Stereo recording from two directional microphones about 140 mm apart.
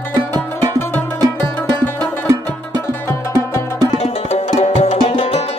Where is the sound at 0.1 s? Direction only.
30° right (ahead or behind).